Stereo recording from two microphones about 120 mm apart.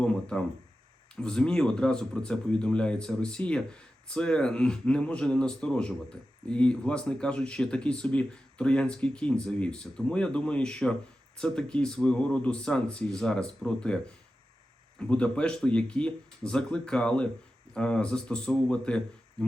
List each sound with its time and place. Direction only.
0.0 s speech: 10° left (ahead or behind)